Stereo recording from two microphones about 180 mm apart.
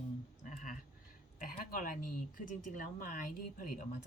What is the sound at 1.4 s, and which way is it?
Speech, 50° left (ahead or behind).